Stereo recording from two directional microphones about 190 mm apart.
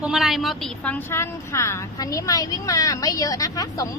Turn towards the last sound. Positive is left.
turn(degrees=20)  # may be behind; listen again after turning